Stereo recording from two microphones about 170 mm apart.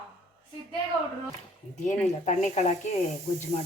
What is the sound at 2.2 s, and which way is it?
Speech, 45° left (ahead or behind).